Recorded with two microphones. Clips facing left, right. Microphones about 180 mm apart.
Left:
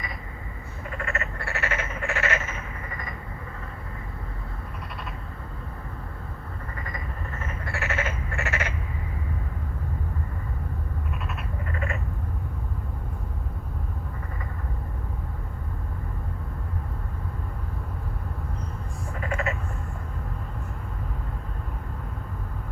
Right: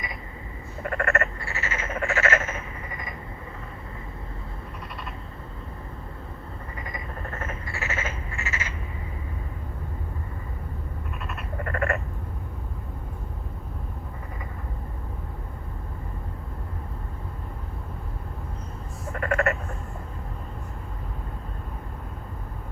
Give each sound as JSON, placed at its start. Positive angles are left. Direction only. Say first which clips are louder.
{"t": 0.9, "sound": "frog", "louder": "right 7 dB", "side_deg": -65}
{"t": 1.4, "sound": "frog", "louder": "left 3 dB", "side_deg": 60}
{"t": 7.6, "sound": "frog", "louder": "left 2 dB", "side_deg": 65}
{"t": 11.6, "sound": "a sound", "louder": "right 7 dB", "side_deg": -60}
{"t": 19.2, "sound": "sheep", "louder": "right 5 dB", "side_deg": -60}